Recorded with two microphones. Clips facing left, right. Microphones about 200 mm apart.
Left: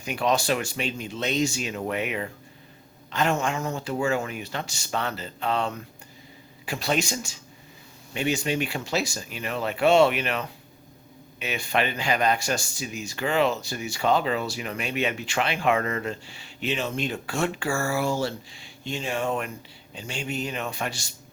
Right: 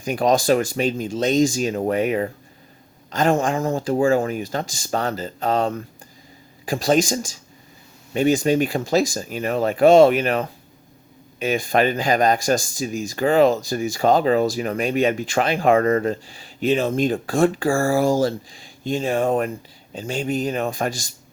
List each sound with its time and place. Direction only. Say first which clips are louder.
0.0 s speech: right 6 dB; 40° right (ahead or behind)
8.1 s speech: right 9 dB; 40° right (ahead or behind)